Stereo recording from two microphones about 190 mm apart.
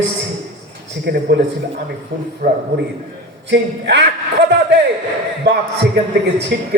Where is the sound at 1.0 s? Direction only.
60° right (ahead or behind).